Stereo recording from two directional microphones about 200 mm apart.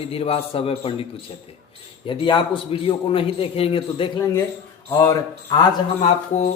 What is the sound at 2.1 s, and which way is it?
A man's voice, 25° left (ahead or behind).